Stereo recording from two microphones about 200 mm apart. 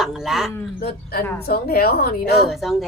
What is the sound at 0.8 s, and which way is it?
A woman's voice, 50° left (ahead or behind).